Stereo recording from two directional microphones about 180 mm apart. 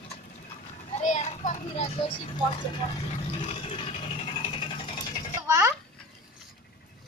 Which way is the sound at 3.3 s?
35° left (ahead or behind).